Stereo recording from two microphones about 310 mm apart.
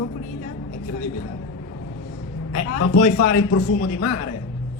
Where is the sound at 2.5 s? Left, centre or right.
Left.